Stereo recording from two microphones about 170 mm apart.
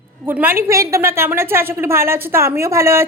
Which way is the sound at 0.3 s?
10° right (ahead or behind).